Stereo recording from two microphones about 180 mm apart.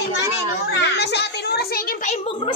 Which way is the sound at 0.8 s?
70° left (ahead or behind).